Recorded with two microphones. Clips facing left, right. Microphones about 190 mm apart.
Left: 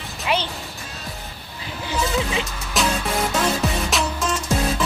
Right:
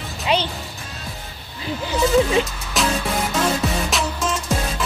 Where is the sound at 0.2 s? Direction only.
20° right (ahead or behind).